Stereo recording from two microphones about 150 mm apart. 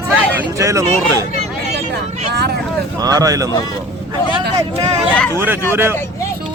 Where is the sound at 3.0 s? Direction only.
25° right (ahead or behind).